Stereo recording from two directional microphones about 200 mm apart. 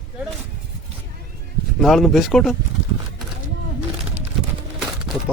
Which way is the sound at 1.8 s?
Centre (ahead or behind).